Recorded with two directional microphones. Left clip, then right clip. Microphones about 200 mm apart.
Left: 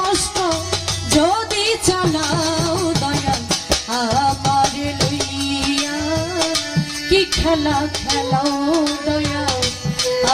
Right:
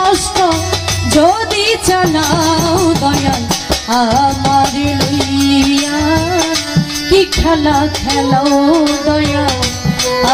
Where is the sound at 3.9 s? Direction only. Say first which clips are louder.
Right 11 dB; 30° left (ahead or behind).